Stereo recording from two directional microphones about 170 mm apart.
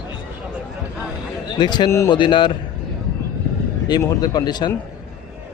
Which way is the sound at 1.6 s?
25° left (ahead or behind).